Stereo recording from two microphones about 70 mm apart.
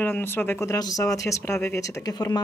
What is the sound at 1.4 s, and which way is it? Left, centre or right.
Speech, left.